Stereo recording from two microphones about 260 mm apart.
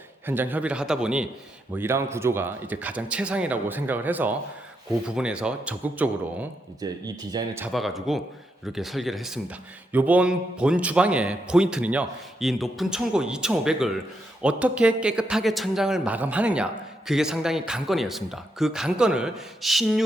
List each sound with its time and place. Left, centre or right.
0.3 s a man's voice: centre